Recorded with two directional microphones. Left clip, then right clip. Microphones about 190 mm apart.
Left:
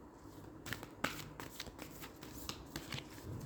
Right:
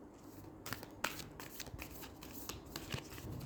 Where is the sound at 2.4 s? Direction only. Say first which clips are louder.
Even; 20° right (ahead or behind).